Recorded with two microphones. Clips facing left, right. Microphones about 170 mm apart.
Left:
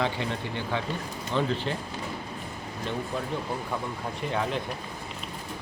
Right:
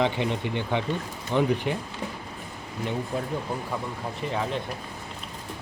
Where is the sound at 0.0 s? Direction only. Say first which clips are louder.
Right 4 dB; 20° right (ahead or behind).